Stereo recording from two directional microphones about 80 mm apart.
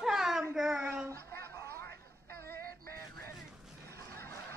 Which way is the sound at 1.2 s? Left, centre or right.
Left.